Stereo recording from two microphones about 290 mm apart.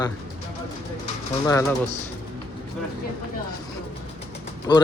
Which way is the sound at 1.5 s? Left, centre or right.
Centre.